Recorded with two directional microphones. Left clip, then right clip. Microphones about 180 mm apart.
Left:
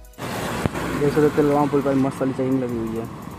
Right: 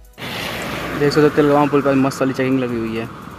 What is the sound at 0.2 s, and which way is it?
Music, 40° left (ahead or behind).